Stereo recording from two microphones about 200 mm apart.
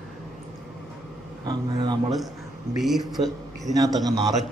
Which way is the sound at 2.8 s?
Centre (ahead or behind).